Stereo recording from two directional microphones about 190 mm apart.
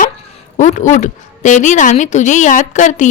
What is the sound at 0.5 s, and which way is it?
A woman's voice, 40° left (ahead or behind).